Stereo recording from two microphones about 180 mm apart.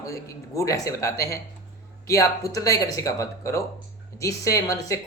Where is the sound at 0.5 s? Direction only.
20° left (ahead or behind).